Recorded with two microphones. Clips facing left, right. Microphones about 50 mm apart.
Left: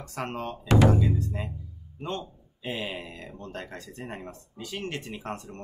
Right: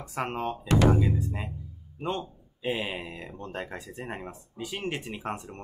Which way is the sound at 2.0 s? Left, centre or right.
Centre.